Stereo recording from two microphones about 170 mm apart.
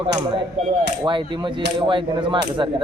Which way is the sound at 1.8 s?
30° right (ahead or behind).